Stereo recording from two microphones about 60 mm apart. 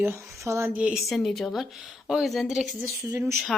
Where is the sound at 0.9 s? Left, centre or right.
Centre.